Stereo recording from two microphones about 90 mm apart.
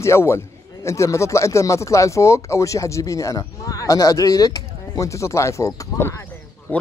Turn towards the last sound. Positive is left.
turn(degrees=20)  # may be behind; listen again after turning